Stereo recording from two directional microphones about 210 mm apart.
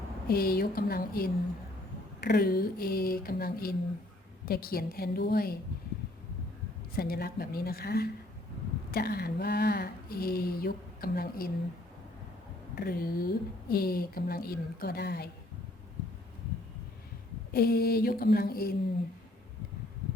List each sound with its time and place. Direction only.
0.3 s speech: 45° left (ahead or behind)
6.9 s speech: 45° left (ahead or behind)
12.7 s speech: 45° left (ahead or behind)
17.5 s speech: 45° left (ahead or behind)